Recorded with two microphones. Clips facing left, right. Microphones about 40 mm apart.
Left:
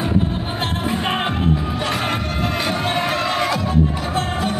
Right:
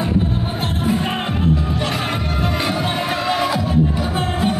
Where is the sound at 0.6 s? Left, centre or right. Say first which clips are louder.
Right 2 dB; left.